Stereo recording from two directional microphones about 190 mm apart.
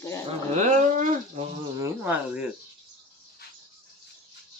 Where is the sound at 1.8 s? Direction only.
15° right (ahead or behind).